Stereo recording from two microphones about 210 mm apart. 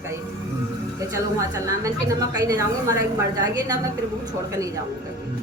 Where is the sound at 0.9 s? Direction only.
15° right (ahead or behind).